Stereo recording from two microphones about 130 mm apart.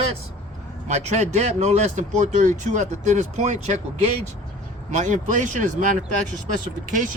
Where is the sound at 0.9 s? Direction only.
60° right (ahead or behind).